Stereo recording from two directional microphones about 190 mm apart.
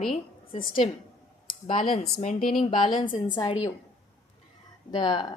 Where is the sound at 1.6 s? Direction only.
25° left (ahead or behind).